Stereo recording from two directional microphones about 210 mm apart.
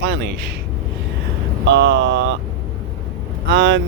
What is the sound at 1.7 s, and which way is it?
Speech, 55° right (ahead or behind).